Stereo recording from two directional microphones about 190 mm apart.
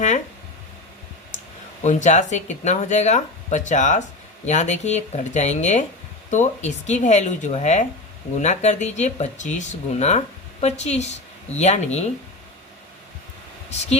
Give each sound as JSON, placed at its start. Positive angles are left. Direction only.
{"t": 1.8, "sound": "speech", "side_deg": 40}